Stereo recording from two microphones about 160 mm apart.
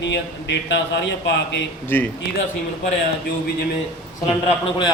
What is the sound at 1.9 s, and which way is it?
Speech, 15° left (ahead or behind).